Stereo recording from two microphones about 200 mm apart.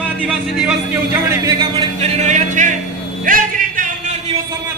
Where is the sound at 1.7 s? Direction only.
35° right (ahead or behind).